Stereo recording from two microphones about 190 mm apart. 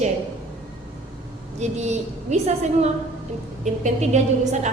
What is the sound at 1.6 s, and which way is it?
A woman's voice, 35° right (ahead or behind).